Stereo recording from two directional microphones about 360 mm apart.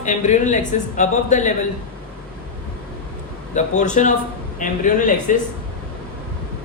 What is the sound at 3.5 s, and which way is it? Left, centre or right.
Speech, centre.